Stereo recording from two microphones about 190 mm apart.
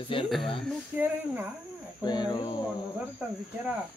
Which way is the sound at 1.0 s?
10° right (ahead or behind).